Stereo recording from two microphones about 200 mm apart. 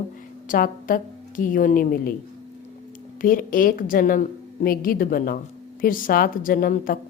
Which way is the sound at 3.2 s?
45° left (ahead or behind).